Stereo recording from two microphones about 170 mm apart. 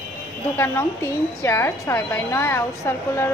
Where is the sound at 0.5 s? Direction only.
15° left (ahead or behind).